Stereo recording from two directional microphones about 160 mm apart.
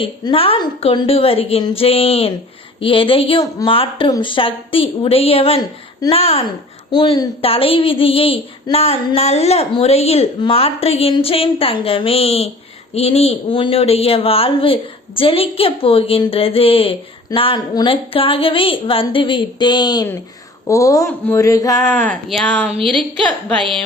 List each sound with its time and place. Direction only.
0.0 s speech: 35° left (ahead or behind)
6.9 s a man's voice: 25° left (ahead or behind)
21.9 s a woman's voice: 10° left (ahead or behind)